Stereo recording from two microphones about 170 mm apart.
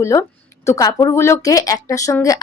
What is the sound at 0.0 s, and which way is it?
A woman's voice, 15° left (ahead or behind).